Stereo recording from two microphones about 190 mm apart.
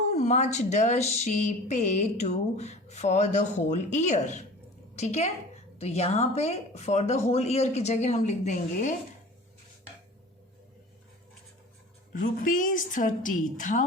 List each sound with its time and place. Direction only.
0.0 s a woman's voice: 35° left (ahead or behind)
12.1 s a woman's voice: 45° left (ahead or behind)